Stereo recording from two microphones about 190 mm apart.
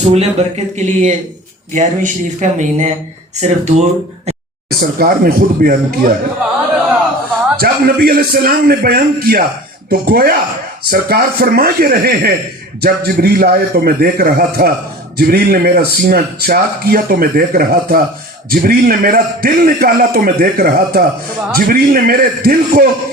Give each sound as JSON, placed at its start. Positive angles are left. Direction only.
{"t": 0.0, "sound": "speech", "side_deg": -35}
{"t": 4.9, "sound": "speech", "side_deg": -50}
{"t": 7.6, "sound": "a man's voice", "side_deg": -55}